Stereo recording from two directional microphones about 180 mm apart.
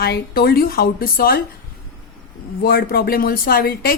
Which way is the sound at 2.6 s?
55° left (ahead or behind).